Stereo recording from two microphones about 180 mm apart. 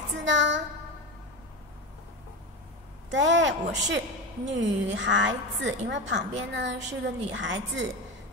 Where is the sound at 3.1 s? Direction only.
90° right.